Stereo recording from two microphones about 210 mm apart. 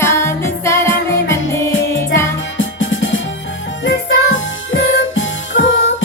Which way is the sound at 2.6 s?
65° left (ahead or behind).